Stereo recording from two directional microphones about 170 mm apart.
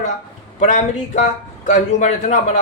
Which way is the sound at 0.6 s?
45° left (ahead or behind).